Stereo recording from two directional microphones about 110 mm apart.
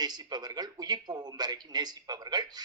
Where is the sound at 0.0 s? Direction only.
40° right (ahead or behind).